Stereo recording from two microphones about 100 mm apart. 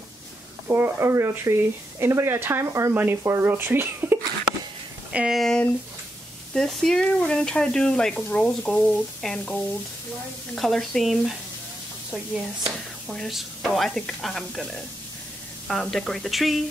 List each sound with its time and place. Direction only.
0.7 s speech: 25° right (ahead or behind)
5.1 s speech: 10° right (ahead or behind)
5.4 s speech: 5° left (ahead or behind)
13.3 s speech: centre (ahead or behind)